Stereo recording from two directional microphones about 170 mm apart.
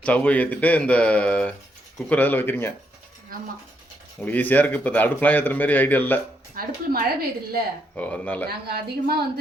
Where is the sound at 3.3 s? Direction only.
55° right (ahead or behind).